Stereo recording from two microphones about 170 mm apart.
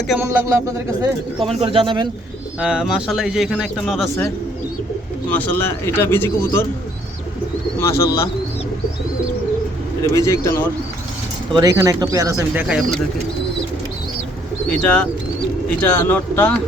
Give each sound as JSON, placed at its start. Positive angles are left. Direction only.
{"t": 0.2, "sound": "speech", "side_deg": -20}
{"t": 1.5, "sound": "speech", "side_deg": -30}
{"t": 2.6, "sound": "speech", "side_deg": -5}
{"t": 5.3, "sound": "speech", "side_deg": 15}
{"t": 7.8, "sound": "speech", "side_deg": 15}
{"t": 10.0, "sound": "a man's voice", "side_deg": 20}
{"t": 11.5, "sound": "speech", "side_deg": -20}
{"t": 12.6, "sound": "speech", "side_deg": -5}
{"t": 14.7, "sound": "speech", "side_deg": 5}